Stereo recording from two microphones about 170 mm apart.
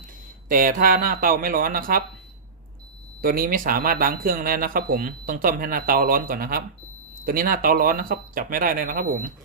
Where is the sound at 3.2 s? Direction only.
60° right (ahead or behind).